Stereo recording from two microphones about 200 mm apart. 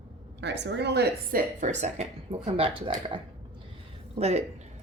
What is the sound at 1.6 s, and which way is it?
Speech, 35° right (ahead or behind).